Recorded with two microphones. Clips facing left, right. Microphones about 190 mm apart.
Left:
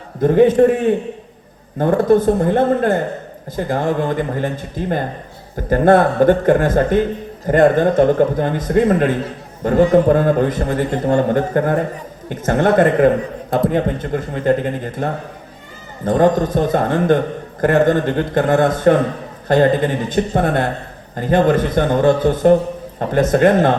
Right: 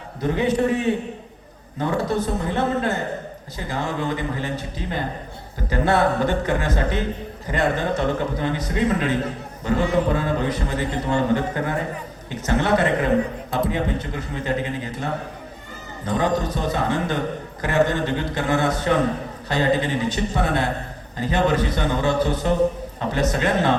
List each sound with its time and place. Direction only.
0.2 s a man's voice: 50° left (ahead or behind)